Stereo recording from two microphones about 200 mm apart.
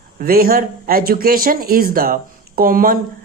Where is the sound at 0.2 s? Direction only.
45° right (ahead or behind).